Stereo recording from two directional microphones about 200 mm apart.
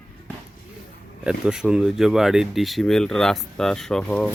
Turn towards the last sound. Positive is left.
turn(degrees=5)  # may be behind; listen again after turning